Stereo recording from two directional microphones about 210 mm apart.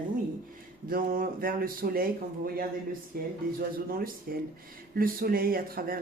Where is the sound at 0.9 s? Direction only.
45° right (ahead or behind).